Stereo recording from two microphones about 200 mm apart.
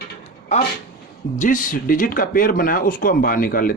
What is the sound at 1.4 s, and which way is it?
Speech, 40° left (ahead or behind).